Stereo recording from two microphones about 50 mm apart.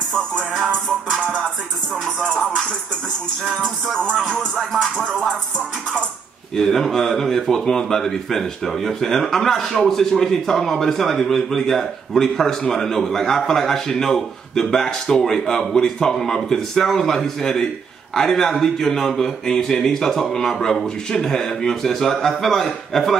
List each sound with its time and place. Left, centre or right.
0.1 s speech: centre
2.1 s speech: centre
3.6 s speech: centre
4.6 s music: centre
6.5 s speech: centre
22.3 s music: centre
22.9 s speech: centre